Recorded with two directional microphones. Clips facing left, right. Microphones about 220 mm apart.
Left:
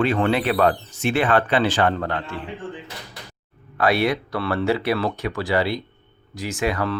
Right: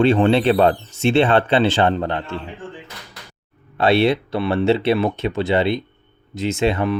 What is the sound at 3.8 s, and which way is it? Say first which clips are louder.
Speech: right 4 dB; 25° right (ahead or behind).